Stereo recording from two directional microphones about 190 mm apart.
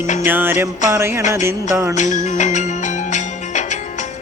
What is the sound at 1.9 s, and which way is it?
Music, 40° left (ahead or behind).